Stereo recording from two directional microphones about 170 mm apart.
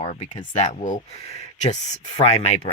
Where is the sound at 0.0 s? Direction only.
45° left (ahead or behind).